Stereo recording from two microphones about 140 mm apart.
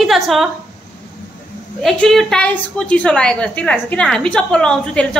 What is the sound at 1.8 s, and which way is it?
A woman's voice, 5° left (ahead or behind).